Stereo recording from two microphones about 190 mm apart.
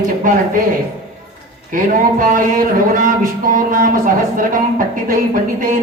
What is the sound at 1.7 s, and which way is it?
Speech, 45° right (ahead or behind).